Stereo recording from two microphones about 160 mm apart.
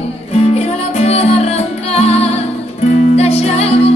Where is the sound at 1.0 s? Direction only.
40° left (ahead or behind).